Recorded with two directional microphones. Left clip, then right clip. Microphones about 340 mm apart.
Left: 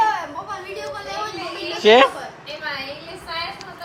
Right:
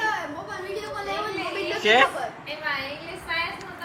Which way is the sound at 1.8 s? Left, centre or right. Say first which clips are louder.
Left 6 dB; centre.